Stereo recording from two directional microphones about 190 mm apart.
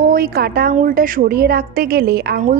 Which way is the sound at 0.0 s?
50° right (ahead or behind).